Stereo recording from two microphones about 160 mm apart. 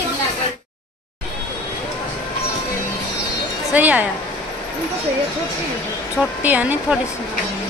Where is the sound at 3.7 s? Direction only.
10° right (ahead or behind).